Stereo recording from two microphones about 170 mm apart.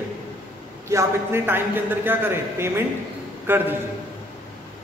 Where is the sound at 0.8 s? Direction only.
15° right (ahead or behind).